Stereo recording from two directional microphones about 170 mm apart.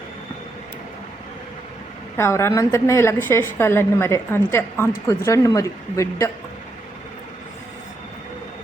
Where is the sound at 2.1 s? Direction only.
15° left (ahead or behind).